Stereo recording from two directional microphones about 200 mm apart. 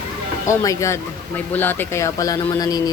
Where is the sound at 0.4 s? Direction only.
15° left (ahead or behind).